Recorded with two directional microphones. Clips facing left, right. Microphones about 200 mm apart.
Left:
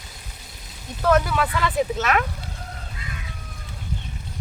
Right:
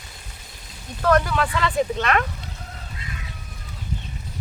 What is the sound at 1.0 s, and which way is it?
Speech, 5° left (ahead or behind).